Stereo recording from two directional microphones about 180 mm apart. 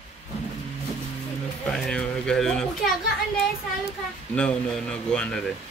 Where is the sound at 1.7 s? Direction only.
5° left (ahead or behind).